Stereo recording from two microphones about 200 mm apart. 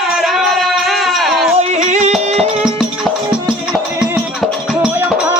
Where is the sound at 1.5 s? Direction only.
35° right (ahead or behind).